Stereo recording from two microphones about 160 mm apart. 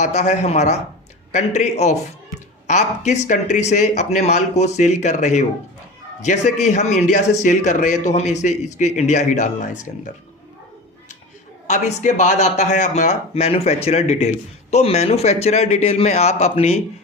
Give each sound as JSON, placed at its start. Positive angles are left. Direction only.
{"t": 0.0, "sound": "speech", "side_deg": 45}
{"t": 11.7, "sound": "a man's voice", "side_deg": 45}